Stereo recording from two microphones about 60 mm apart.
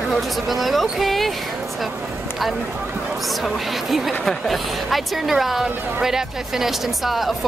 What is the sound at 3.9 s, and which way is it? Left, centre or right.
A woman's voice, centre.